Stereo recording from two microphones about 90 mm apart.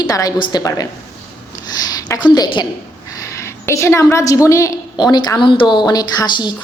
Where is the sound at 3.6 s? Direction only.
30° left (ahead or behind).